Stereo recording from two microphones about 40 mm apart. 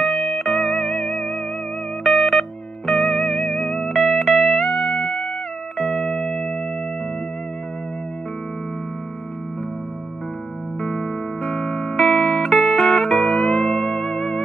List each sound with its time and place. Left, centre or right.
0.0 s music: centre
3.8 s music: centre
5.0 s music: left
5.8 s music: centre
6.0 s music: centre
6.3 s music: centre
10.8 s music: left
12.0 s music: centre